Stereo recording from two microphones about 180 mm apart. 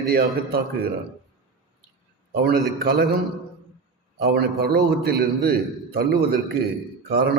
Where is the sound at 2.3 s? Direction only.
60° right (ahead or behind).